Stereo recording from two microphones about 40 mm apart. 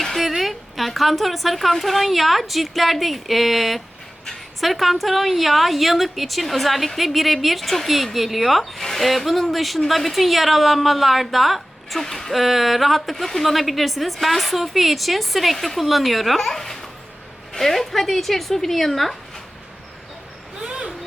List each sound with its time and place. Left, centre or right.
0.0 s a woman's voice: centre
12.0 s speech: centre
12.3 s a woman's voice: centre
20.7 s vehicle: right